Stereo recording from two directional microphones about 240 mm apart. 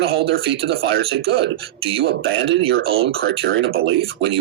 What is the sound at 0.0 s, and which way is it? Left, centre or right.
Speech, right.